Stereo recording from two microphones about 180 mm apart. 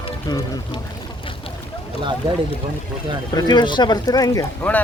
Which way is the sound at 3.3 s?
25° left (ahead or behind).